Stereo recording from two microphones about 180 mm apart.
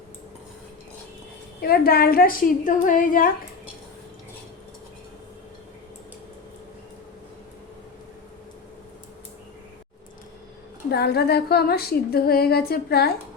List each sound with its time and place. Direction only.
1.6 s a woman's voice: 55° left (ahead or behind)
10.9 s a woman's voice: 65° left (ahead or behind)